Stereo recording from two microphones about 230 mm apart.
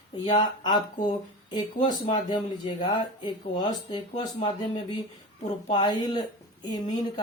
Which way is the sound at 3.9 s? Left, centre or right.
Centre.